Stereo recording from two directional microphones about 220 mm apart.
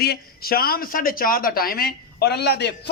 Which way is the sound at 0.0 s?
45° left (ahead or behind).